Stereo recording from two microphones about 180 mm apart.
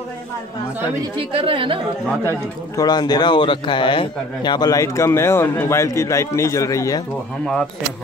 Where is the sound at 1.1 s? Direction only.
30° right (ahead or behind).